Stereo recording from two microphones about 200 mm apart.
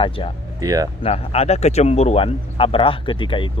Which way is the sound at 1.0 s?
30° left (ahead or behind).